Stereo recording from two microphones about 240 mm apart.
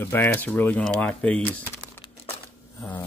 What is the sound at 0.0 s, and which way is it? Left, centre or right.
Speech, centre.